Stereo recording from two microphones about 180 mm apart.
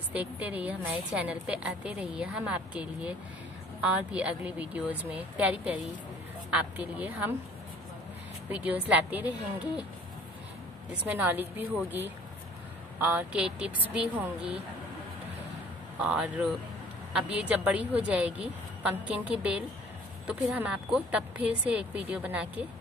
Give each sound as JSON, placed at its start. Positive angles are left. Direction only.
{"t": 0.1, "sound": "a woman's voice", "side_deg": -10}
{"t": 8.5, "sound": "a woman's voice", "side_deg": -10}
{"t": 11.1, "sound": "a woman's voice", "side_deg": -10}
{"t": 16.0, "sound": "a woman's voice", "side_deg": -5}